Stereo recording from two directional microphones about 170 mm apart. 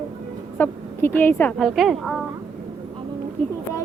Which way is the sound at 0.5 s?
10° left (ahead or behind).